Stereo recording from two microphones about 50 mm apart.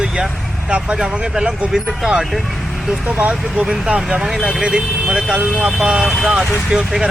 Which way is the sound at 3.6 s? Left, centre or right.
Centre.